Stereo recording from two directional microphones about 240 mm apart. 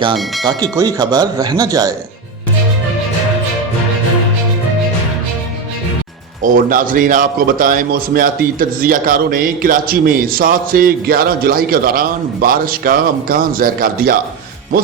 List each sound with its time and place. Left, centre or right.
0.4 s speech: centre
6.4 s a man's voice: right